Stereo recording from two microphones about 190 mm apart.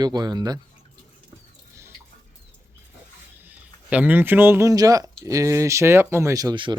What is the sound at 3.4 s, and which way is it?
Speech, 10° right (ahead or behind).